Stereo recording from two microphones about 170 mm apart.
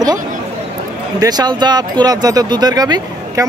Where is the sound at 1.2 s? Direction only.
25° right (ahead or behind).